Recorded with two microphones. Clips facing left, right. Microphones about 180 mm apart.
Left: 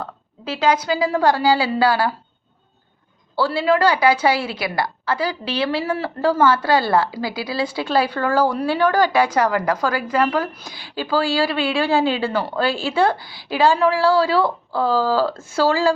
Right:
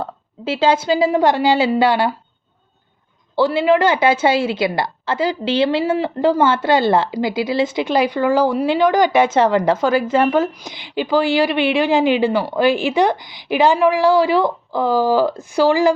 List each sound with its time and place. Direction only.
0.0 s a woman's voice: 25° right (ahead or behind)
3.3 s a woman's voice: 20° right (ahead or behind)